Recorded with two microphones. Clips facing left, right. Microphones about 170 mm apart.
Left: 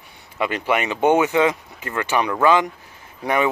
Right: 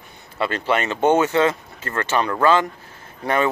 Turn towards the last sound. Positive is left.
turn(degrees=15)  # may be behind; listen again after turning